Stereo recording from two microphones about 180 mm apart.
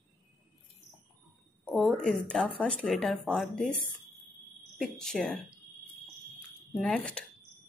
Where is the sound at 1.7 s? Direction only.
5° left (ahead or behind).